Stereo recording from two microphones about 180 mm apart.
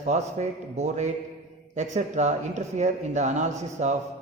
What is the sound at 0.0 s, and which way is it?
A man's voice, 40° right (ahead or behind).